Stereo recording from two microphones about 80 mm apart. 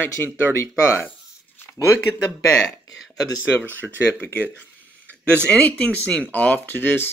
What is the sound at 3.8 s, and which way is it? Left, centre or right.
Speech, centre.